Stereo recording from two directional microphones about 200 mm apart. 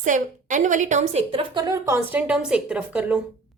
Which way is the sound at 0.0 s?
40° right (ahead or behind).